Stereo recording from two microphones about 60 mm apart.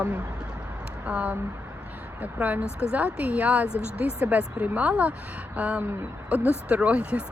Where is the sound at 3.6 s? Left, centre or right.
Left.